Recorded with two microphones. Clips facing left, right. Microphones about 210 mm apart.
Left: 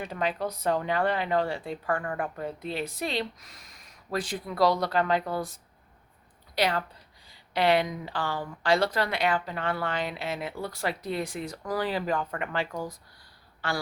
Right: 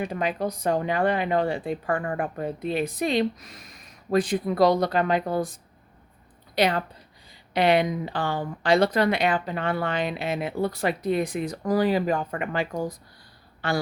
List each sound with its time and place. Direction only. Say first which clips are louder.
0.0 s speech: right 3 dB; 15° right (ahead or behind)
6.6 s speech: right 4 dB; 20° right (ahead or behind)
13.6 s speech: right 5 dB; 20° right (ahead or behind)